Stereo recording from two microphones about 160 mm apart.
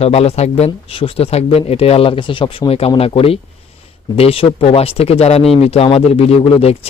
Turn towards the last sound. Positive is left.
turn(degrees=40)  # may be behind; listen again after turning